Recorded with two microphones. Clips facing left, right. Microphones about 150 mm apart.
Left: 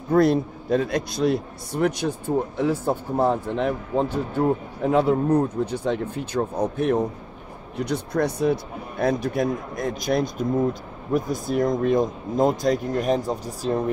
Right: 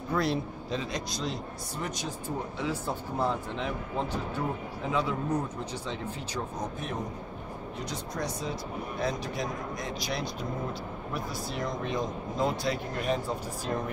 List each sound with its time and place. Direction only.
0.1 s speech: 50° left (ahead or behind)